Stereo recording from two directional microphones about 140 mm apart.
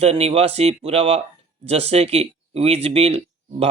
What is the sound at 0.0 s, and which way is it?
Speech, 45° right (ahead or behind).